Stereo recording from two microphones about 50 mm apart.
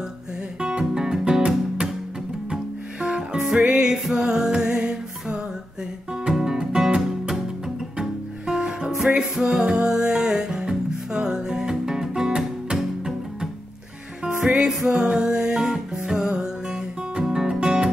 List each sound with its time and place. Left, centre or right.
0.6 s music: centre